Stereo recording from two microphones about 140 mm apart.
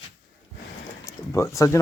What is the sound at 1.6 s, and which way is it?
Speech, 20° left (ahead or behind).